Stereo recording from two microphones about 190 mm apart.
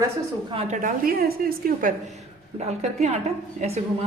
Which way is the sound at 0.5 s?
30° right (ahead or behind).